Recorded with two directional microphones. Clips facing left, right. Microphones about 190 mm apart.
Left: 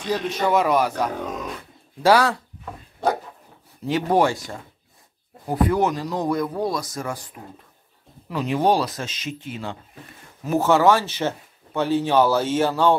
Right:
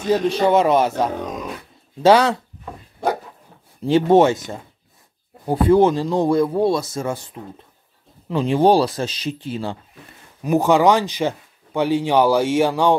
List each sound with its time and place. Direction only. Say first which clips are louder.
0.1 s speech: right 5 dB; 30° right (ahead or behind)
3.8 s speech: right 6 dB; 25° right (ahead or behind)
5.5 s speech: right 6 dB; 30° right (ahead or behind)
8.3 s speech: right 5 dB; 25° right (ahead or behind)
10.4 s speech: right 2 dB; 15° right (ahead or behind)